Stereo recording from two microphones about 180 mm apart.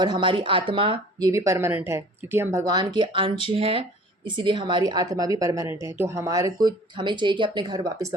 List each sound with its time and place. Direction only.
0.0 s speech: 25° right (ahead or behind)
1.3 s speech: 15° right (ahead or behind)